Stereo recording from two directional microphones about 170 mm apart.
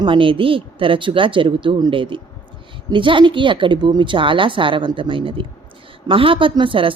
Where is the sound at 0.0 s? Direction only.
30° right (ahead or behind).